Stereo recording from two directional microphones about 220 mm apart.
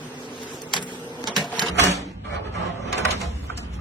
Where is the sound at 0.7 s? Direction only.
20° right (ahead or behind).